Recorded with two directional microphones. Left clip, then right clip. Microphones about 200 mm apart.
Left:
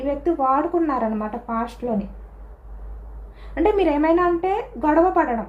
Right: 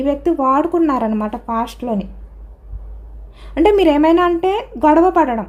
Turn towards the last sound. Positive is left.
turn(degrees=-65)  # may be behind; listen again after turning